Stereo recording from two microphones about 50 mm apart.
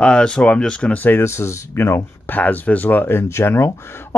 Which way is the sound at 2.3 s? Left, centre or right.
Left.